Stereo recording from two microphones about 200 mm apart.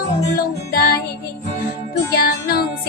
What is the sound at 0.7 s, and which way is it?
Music, 50° left (ahead or behind).